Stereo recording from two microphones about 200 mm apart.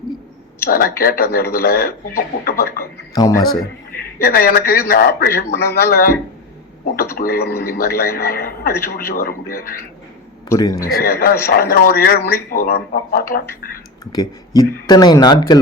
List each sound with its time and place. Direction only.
0.7 s speech: 45° left (ahead or behind)
2.8 s a man's voice: 15° left (ahead or behind)
4.2 s speech: 50° left (ahead or behind)
7.2 s speech: 50° left (ahead or behind)
10.5 s a man's voice: 20° left (ahead or behind)
10.8 s speech: 45° left (ahead or behind)
14.0 s speech: 20° left (ahead or behind)